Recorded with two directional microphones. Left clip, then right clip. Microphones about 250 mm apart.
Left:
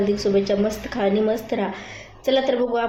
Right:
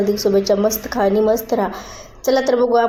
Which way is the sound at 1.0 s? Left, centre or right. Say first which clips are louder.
Right 5 dB; centre.